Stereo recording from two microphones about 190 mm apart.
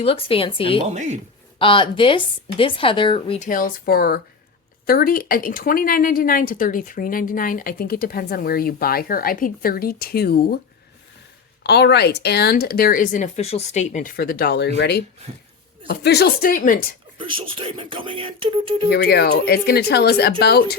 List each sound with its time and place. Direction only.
0.0 s speech: 30° left (ahead or behind)
0.9 s speech: 40° right (ahead or behind)
1.5 s speech: 25° left (ahead or behind)
3.4 s a woman's voice: 45° left (ahead or behind)
11.6 s a woman's voice: 60° left (ahead or behind)
17.2 s speech: 25° right (ahead or behind)
18.9 s a woman's voice: 55° left (ahead or behind)